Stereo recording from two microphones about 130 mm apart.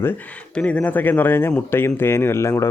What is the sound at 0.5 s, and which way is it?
Speech, 10° left (ahead or behind).